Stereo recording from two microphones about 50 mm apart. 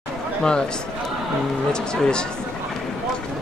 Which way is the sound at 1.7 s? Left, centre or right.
Centre.